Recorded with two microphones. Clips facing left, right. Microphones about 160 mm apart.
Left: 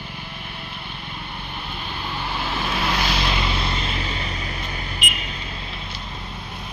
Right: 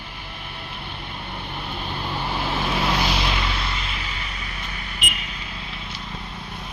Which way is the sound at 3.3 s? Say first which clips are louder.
Left 2 dB; 20° left (ahead or behind).